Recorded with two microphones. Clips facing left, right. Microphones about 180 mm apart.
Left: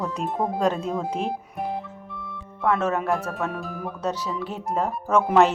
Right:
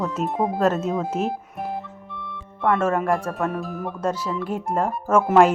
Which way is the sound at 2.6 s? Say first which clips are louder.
Right 2 dB; centre (ahead or behind).